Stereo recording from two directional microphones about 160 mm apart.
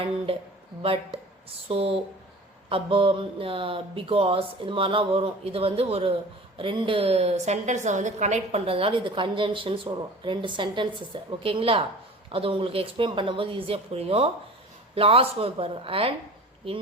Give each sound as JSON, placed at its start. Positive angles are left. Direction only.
{"t": 1.5, "sound": "a woman's voice", "side_deg": -35}